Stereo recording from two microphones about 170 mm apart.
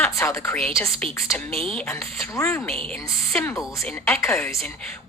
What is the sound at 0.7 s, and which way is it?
Speech, 15° left (ahead or behind).